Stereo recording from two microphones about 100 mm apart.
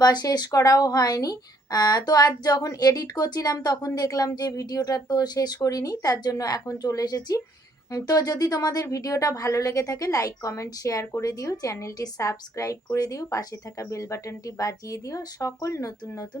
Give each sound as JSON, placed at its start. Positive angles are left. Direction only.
{"t": 0.0, "sound": "a woman's voice", "side_deg": 40}